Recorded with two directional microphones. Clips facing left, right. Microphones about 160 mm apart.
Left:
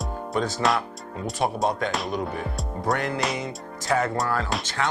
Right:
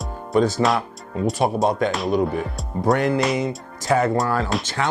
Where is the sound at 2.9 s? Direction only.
10° right (ahead or behind).